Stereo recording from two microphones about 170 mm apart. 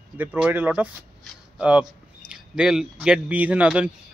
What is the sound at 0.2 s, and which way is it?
Speech, 10° right (ahead or behind).